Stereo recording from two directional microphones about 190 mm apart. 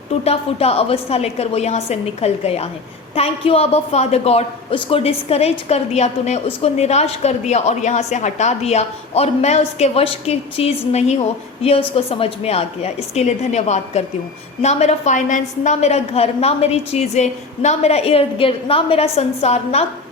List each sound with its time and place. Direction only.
0.3 s speech: 30° left (ahead or behind)